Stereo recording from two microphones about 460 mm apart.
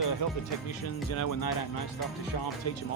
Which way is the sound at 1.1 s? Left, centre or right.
Left.